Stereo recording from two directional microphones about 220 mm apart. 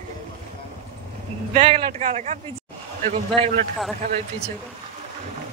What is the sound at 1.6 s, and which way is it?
A man's voice, 25° right (ahead or behind).